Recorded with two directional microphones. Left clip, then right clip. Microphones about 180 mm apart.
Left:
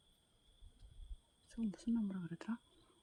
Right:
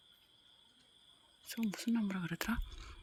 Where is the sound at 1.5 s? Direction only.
5° right (ahead or behind).